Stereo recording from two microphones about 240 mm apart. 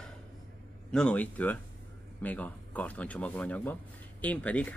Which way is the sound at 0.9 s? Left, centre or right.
Centre.